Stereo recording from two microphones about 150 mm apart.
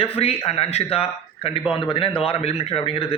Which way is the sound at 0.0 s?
40° left (ahead or behind).